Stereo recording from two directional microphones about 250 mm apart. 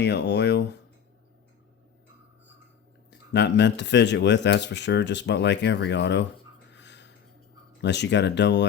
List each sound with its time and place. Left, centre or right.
0.0 s speech: left
3.1 s speech: left
6.7 s a sound: left
7.8 s speech: left